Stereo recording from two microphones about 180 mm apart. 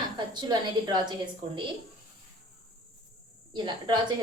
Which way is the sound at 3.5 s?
25° right (ahead or behind).